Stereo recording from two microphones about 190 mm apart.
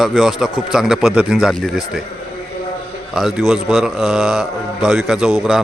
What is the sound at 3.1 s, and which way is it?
A man's voice, centre (ahead or behind).